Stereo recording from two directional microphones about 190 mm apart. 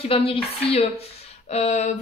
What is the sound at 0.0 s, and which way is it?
A woman's voice, 30° left (ahead or behind).